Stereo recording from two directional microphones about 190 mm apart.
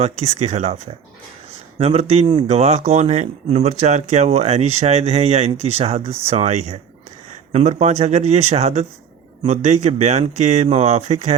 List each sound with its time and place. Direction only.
0.0 s speech: 35° right (ahead or behind)
1.8 s speech: 35° right (ahead or behind)